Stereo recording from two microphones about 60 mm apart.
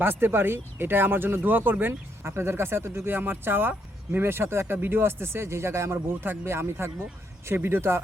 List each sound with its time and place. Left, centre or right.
0.0 s speech: right